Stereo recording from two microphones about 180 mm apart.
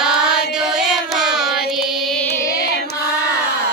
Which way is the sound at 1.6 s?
Centre (ahead or behind).